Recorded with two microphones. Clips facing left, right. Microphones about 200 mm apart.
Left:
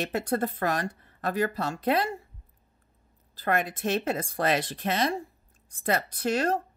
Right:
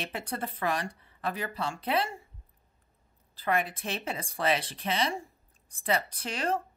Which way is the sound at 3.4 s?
45° left (ahead or behind).